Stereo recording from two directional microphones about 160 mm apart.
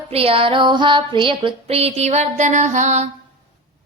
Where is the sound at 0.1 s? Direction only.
35° right (ahead or behind).